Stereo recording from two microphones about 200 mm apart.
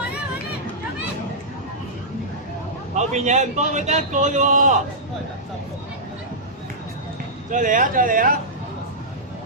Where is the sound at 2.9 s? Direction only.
35° right (ahead or behind).